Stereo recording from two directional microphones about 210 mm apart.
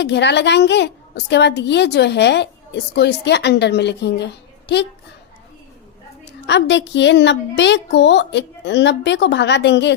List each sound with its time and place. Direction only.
0.0 s a woman's voice: 55° left (ahead or behind)
6.5 s a woman's voice: 60° left (ahead or behind)